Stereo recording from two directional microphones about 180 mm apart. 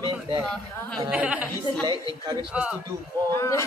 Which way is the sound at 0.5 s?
5° left (ahead or behind).